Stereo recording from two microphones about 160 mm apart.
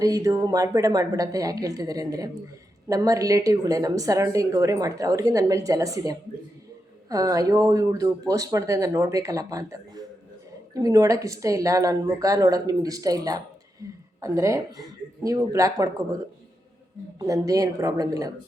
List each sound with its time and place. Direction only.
0.0 s speech: 20° right (ahead or behind)
17.2 s speech: 20° right (ahead or behind)